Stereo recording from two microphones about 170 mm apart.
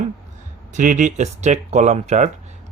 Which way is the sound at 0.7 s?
45° right (ahead or behind).